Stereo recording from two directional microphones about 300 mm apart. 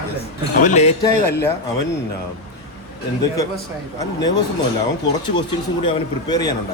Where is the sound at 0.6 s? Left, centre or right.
Left.